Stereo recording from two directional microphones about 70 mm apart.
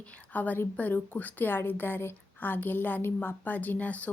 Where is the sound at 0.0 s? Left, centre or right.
Left.